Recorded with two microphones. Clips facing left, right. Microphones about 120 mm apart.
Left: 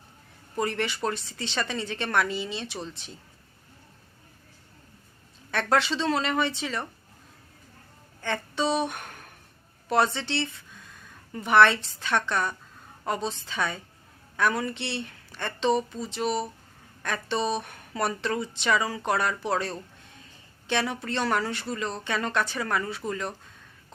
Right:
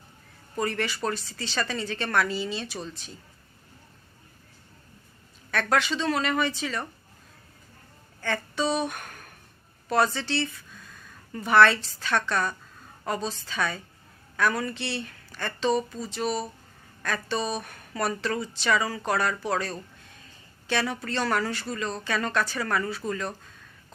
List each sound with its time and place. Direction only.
0.5 s speech: 20° left (ahead or behind)
5.5 s speech: 25° left (ahead or behind)
8.2 s speech: 25° left (ahead or behind)